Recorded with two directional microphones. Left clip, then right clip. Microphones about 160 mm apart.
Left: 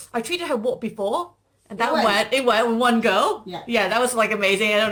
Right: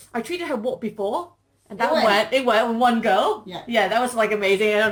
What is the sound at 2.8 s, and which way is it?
Speech, 50° left (ahead or behind).